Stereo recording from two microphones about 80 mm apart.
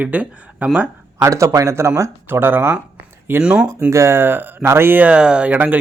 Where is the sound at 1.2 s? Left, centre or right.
Right.